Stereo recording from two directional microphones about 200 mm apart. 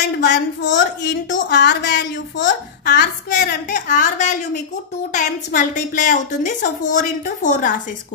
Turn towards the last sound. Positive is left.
turn(degrees=40)  # may be behind; listen again after turning